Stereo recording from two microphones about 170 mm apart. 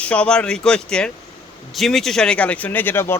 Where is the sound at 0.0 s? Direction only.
5° left (ahead or behind).